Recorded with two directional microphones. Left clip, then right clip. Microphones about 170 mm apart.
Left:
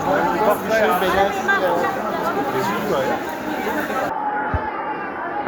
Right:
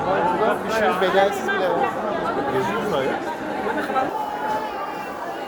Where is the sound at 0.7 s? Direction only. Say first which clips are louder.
Left 2 dB; 20° right (ahead or behind).